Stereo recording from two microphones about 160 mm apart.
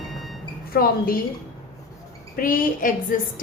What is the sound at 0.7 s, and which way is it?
Speech, 65° left (ahead or behind).